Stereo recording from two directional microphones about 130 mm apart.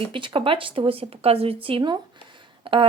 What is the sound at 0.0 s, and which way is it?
Speech, 40° right (ahead or behind).